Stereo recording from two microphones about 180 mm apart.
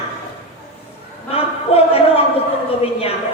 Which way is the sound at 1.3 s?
35° left (ahead or behind).